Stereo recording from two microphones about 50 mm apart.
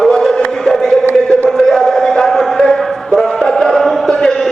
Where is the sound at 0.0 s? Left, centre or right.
Centre.